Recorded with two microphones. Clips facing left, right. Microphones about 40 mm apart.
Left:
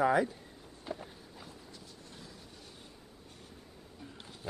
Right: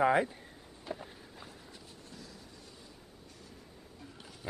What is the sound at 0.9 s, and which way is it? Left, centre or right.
Walk, centre.